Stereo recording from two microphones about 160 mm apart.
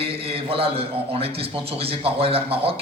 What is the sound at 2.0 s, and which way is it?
Speech, 35° right (ahead or behind).